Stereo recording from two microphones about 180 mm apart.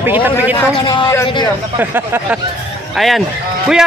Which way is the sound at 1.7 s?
10° right (ahead or behind).